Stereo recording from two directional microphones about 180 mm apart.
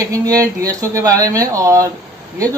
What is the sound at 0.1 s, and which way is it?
Speech, 20° right (ahead or behind).